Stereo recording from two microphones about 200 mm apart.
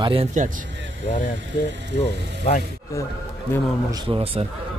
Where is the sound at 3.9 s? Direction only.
25° right (ahead or behind).